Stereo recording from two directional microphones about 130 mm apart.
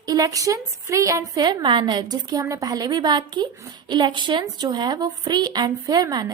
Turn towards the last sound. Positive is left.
turn(degrees=-30)  # may be behind; listen again after turning